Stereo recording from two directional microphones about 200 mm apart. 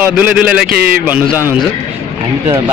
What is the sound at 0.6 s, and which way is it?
Speech, 50° right (ahead or behind).